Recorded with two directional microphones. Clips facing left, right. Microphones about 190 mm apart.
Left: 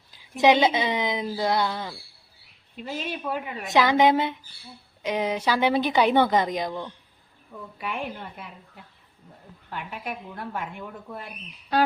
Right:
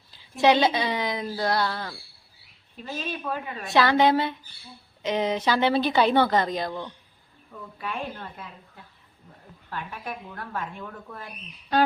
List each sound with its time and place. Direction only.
0.1 s speech: 15° left (ahead or behind)
6.7 s speech: centre (ahead or behind)
7.8 s speech: 15° left (ahead or behind)